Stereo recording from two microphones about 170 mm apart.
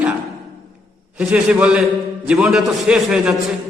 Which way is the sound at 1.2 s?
5° right (ahead or behind).